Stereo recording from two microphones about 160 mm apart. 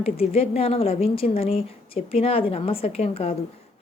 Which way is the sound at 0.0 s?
40° left (ahead or behind).